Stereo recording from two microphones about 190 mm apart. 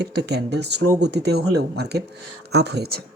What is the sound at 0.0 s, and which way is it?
Speech, 60° right (ahead or behind).